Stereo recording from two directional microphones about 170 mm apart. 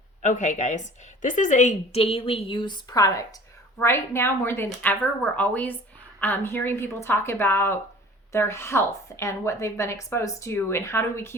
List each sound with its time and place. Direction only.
0.2 s a woman's voice: 45° left (ahead or behind); by 11.3 s 15° left (ahead or behind)